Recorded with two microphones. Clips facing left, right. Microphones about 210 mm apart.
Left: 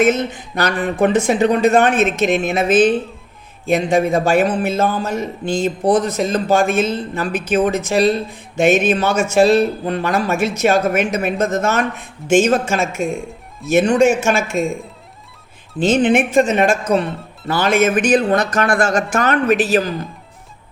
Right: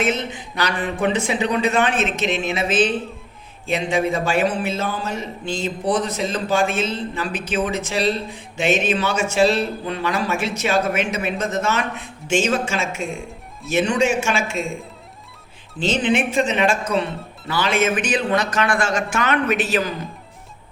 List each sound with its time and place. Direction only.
0.0 s a man's voice: 45° left (ahead or behind)
15.8 s a man's voice: 50° left (ahead or behind)